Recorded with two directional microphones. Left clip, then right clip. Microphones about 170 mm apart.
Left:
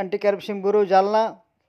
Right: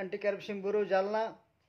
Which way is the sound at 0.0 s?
40° left (ahead or behind).